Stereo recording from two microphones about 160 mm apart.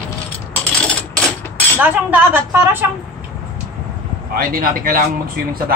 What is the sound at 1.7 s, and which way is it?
A woman's voice, 10° right (ahead or behind).